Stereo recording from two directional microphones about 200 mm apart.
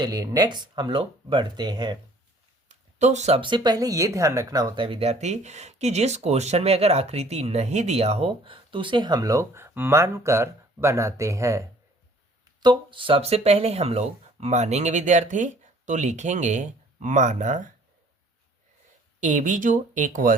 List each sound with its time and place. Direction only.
0.0 s speech: 20° right (ahead or behind)
2.6 s speech: 35° right (ahead or behind)
19.2 s speech: 40° right (ahead or behind)